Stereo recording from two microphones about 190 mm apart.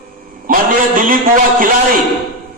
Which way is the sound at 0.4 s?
45° right (ahead or behind).